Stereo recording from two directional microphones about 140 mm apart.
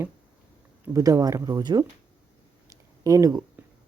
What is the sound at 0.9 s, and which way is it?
Speech, 25° right (ahead or behind).